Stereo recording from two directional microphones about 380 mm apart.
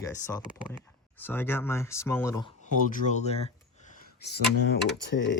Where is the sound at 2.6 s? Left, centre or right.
Centre.